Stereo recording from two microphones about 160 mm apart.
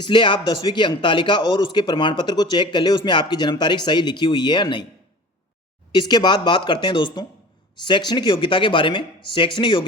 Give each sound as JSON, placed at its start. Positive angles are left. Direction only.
{"t": 0.0, "sound": "a man's voice", "side_deg": 30}
{"t": 5.9, "sound": "a man's voice", "side_deg": 30}